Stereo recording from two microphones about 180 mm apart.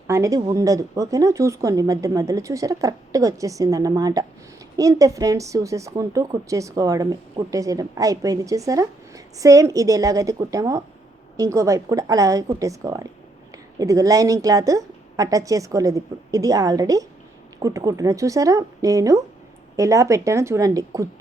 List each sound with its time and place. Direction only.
0.1 s a woman's voice: 20° right (ahead or behind)